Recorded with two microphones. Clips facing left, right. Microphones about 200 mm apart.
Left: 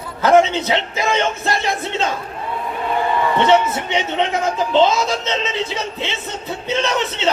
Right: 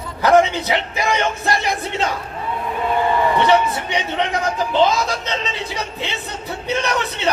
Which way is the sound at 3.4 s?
20° left (ahead or behind).